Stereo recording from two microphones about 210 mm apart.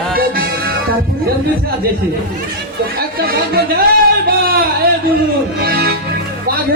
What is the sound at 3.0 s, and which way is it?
Music, 45° right (ahead or behind).